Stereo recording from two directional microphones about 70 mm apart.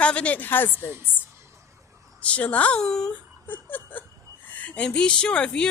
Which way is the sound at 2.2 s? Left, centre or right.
Centre.